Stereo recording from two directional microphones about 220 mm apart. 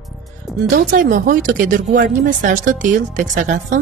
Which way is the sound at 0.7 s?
40° right (ahead or behind).